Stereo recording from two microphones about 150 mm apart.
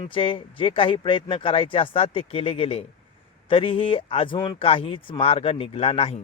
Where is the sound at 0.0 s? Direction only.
35° left (ahead or behind).